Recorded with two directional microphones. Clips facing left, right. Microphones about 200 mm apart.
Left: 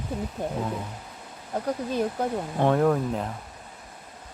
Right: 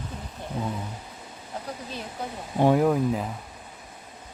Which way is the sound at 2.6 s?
10° right (ahead or behind).